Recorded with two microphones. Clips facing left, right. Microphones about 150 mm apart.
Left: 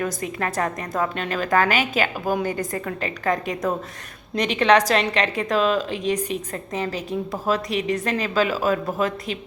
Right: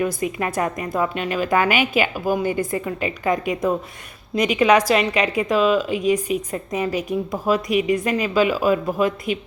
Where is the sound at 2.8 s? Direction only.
10° right (ahead or behind).